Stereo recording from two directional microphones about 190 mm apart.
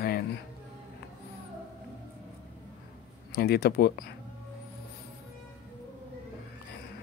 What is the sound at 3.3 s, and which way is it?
Speech, 55° left (ahead or behind).